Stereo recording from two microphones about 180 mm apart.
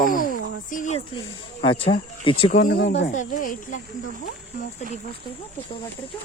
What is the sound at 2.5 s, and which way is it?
Speech, 50° left (ahead or behind).